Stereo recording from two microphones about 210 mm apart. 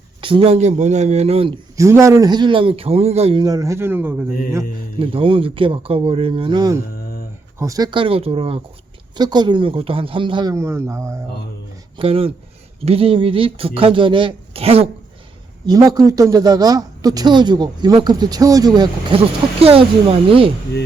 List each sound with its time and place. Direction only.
0.2 s a woman's voice: 25° right (ahead or behind)
1.7 s a man's voice: 15° right (ahead or behind)
4.9 s a woman's voice: 25° right (ahead or behind)
11.9 s a woman's voice: 25° right (ahead or behind)